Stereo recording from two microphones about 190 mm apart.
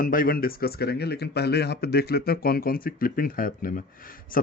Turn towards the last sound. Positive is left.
turn(degrees=45)  # may be behind; listen again after turning